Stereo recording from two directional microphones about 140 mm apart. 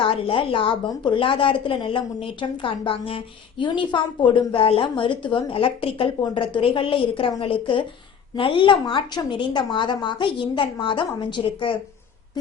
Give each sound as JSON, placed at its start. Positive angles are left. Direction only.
{"t": 0.0, "sound": "a woman's voice", "side_deg": 40}